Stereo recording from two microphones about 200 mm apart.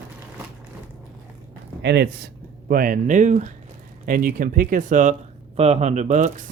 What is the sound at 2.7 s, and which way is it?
Speech, 45° right (ahead or behind).